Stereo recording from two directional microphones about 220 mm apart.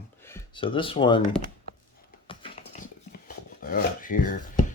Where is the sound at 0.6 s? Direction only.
25° left (ahead or behind).